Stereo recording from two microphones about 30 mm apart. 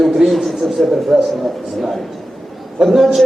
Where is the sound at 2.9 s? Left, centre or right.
Centre.